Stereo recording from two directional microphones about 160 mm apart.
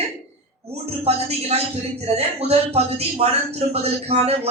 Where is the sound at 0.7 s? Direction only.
40° right (ahead or behind).